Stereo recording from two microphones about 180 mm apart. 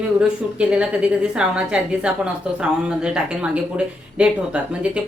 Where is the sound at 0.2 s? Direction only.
5° right (ahead or behind).